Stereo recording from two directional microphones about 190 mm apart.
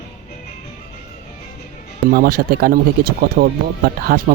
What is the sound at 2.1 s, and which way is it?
Speech, 50° right (ahead or behind).